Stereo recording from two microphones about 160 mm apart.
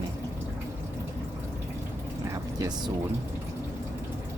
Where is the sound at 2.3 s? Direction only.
20° right (ahead or behind).